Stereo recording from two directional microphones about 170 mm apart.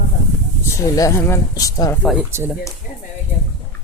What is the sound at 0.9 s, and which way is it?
Speech, 15° left (ahead or behind).